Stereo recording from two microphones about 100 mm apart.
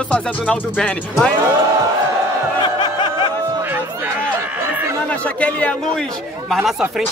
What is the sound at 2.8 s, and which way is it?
Snicker, 50° left (ahead or behind).